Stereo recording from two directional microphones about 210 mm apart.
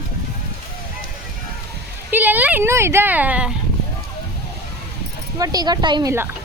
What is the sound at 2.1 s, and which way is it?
Speech, 10° right (ahead or behind).